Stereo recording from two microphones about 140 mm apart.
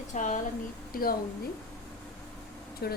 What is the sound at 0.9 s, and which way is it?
Speech, 90° left.